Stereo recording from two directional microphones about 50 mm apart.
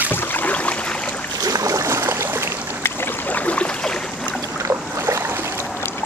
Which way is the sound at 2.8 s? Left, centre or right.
Left.